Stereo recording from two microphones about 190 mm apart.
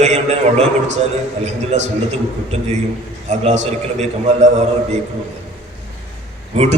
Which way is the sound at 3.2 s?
40° right (ahead or behind).